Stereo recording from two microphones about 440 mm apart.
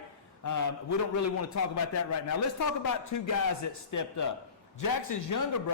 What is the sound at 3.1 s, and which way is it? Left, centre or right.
A man's voice, left.